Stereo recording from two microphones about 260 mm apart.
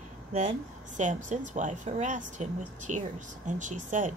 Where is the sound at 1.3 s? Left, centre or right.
Right.